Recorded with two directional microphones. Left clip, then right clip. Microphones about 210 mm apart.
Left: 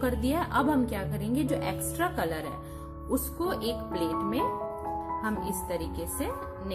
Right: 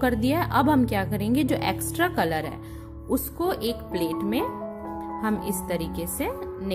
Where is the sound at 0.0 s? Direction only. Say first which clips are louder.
Right 5 dB; 30° right (ahead or behind).